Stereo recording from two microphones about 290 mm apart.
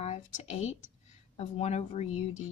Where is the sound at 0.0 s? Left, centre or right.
Left.